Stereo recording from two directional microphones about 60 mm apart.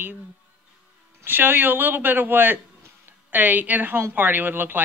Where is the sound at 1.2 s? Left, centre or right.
Right.